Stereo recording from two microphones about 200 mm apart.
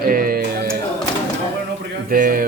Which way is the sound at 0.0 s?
45° right (ahead or behind).